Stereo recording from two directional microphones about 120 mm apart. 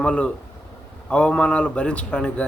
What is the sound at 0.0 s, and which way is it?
A man's voice, 10° left (ahead or behind).